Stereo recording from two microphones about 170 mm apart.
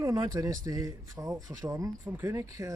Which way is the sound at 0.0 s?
20° right (ahead or behind).